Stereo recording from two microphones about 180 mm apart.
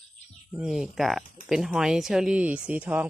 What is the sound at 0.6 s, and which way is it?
Speech, centre (ahead or behind).